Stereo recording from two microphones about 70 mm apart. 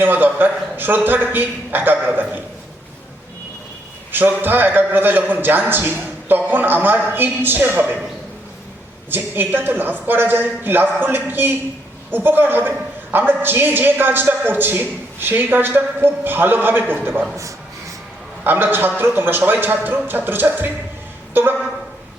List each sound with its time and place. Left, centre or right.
0.0 s a man's voice: right
4.1 s a man's voice: right
9.0 s a man's voice: right
17.3 s a sound: right
18.4 s a man's voice: right